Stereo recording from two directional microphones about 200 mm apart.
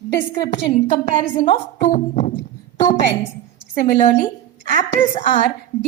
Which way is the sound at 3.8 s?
40° left (ahead or behind).